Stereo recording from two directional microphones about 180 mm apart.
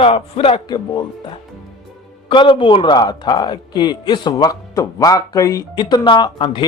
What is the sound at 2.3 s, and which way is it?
A man's voice, 30° left (ahead or behind).